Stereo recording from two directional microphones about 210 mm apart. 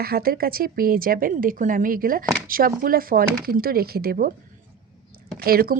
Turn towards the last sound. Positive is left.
turn(degrees=-45)  # may be behind; listen again after turning